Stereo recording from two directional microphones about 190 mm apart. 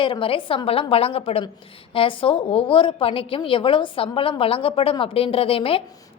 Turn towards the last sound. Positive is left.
turn(degrees=30)  # may be behind; listen again after turning